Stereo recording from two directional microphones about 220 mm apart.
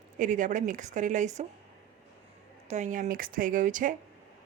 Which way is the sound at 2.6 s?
30° right (ahead or behind).